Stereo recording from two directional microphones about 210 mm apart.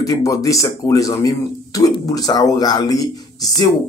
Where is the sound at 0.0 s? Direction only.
15° left (ahead or behind).